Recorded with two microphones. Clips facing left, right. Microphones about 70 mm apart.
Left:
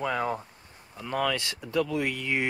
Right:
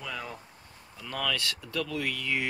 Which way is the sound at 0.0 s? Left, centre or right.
Left.